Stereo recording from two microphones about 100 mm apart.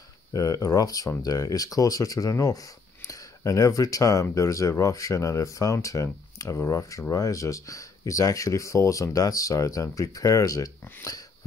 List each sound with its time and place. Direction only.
0.3 s speech: 35° left (ahead or behind)